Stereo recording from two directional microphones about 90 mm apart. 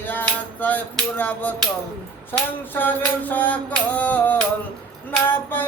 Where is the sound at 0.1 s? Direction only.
20° left (ahead or behind).